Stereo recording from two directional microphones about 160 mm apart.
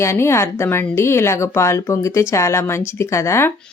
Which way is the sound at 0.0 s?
15° left (ahead or behind).